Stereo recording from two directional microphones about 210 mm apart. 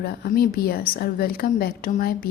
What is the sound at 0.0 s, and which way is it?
A woman's voice, 50° left (ahead or behind).